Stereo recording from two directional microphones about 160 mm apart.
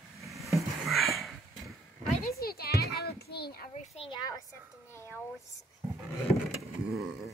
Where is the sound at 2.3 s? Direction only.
75° left (ahead or behind).